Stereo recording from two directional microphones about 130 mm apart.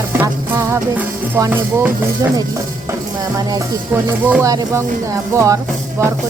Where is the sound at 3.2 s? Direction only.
30° right (ahead or behind).